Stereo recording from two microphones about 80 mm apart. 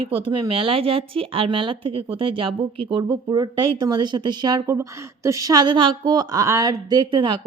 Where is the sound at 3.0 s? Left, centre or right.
Right.